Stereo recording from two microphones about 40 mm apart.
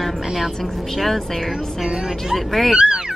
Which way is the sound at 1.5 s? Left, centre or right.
Centre.